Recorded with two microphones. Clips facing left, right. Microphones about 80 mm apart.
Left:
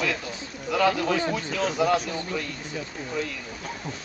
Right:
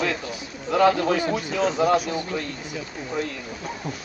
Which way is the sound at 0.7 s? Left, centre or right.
Right.